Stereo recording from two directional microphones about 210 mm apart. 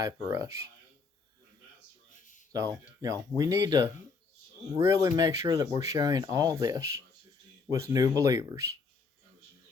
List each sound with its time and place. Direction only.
0.0 s speech: 15° right (ahead or behind)
2.5 s speech: 15° right (ahead or behind)